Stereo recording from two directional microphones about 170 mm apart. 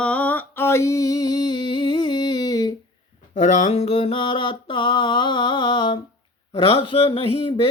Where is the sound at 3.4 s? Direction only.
40° left (ahead or behind).